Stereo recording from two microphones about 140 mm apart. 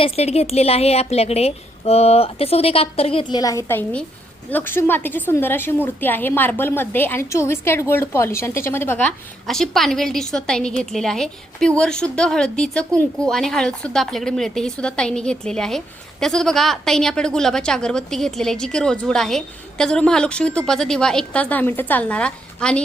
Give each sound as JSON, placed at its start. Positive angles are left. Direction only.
{"t": 0.0, "sound": "a woman's voice", "side_deg": 45}